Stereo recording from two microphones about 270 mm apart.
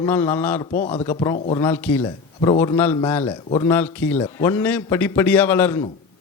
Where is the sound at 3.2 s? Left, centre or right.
Centre.